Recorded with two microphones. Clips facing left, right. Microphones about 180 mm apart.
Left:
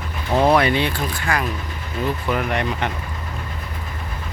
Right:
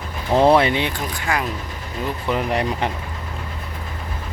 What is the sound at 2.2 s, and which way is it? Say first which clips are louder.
Speech: right 4 dB; 30° right (ahead or behind).